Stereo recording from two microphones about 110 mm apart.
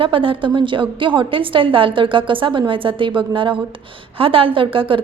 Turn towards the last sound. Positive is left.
turn(degrees=-50)  # may be behind; listen again after turning